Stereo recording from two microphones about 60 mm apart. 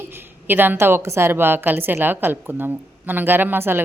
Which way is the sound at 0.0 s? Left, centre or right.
Right.